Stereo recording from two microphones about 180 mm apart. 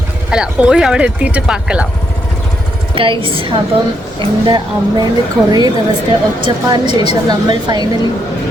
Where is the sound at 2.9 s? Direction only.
30° right (ahead or behind).